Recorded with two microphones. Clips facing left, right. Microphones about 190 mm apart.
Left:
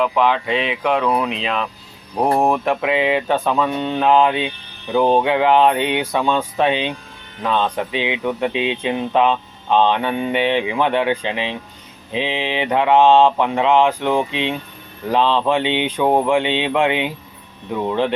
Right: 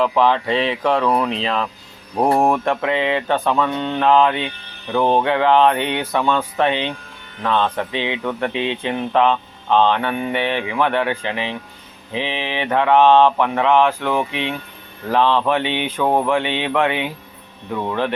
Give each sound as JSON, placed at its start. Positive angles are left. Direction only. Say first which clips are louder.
{"t": 0.0, "sound": "speech", "louder": "right 1 dB", "side_deg": 5}
{"t": 2.1, "sound": "speech", "louder": "right 1 dB", "side_deg": 0}